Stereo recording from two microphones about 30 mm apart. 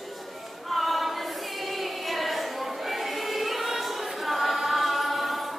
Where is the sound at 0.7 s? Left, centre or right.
Centre.